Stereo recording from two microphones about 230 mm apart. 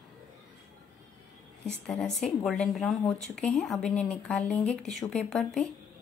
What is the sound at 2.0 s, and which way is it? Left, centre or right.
Speech, left.